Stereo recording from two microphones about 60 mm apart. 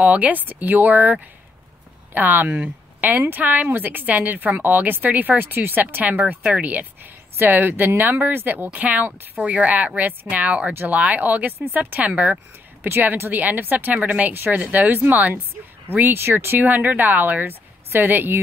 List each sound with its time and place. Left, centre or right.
0.0 s a woman's voice: right
12.8 s a woman's voice: right
14.3 s a woman's voice: right